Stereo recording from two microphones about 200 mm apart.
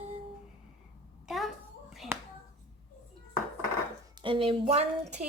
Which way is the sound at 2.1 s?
10° right (ahead or behind).